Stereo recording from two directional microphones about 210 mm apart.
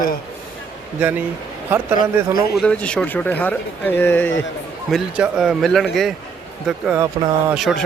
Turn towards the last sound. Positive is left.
turn(degrees=0)  # may be behind; listen again after turning